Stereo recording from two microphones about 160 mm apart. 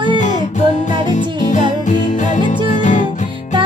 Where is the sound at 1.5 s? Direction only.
50° left (ahead or behind).